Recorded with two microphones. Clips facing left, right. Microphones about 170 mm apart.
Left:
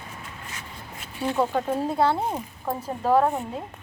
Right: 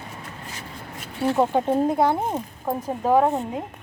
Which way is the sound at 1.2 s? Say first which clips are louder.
Right 4 dB; 20° right (ahead or behind).